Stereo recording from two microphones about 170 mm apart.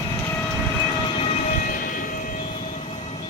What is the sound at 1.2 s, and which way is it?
Train, 40° left (ahead or behind).